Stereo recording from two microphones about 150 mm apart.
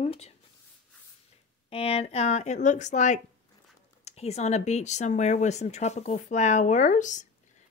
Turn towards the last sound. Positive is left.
turn(degrees=55)  # may be behind; listen again after turning